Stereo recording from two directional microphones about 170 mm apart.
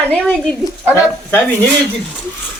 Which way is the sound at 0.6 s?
15° left (ahead or behind).